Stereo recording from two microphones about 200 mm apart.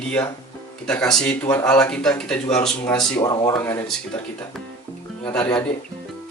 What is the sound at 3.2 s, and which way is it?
Speech, 20° left (ahead or behind).